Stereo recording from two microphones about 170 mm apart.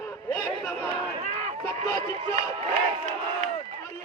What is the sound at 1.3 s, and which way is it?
Run, 45° right (ahead or behind).